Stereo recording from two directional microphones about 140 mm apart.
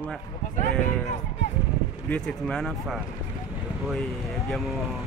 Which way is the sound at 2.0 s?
5° left (ahead or behind).